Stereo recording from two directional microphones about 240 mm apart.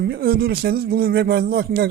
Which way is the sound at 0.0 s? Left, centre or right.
Right.